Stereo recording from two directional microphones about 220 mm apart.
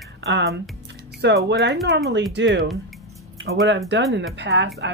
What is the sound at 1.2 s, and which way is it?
Speech, 50° right (ahead or behind).